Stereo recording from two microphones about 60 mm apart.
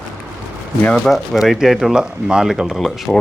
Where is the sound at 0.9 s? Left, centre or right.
Centre.